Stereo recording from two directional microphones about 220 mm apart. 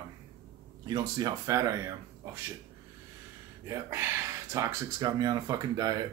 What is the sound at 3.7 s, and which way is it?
Speech, 10° right (ahead or behind).